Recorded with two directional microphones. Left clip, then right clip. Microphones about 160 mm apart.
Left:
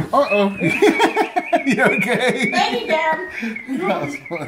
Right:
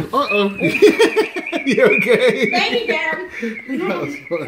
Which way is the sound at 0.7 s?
40° left (ahead or behind).